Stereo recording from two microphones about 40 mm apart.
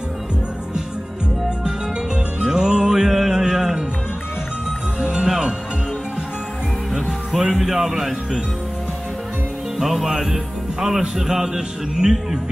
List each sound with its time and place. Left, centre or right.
2.4 s music: centre
5.0 s music: right
6.9 s music: centre
9.8 s speech: centre